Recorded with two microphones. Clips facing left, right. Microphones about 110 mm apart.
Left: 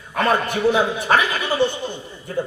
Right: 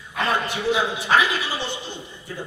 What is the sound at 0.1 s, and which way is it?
A man's voice, 50° left (ahead or behind).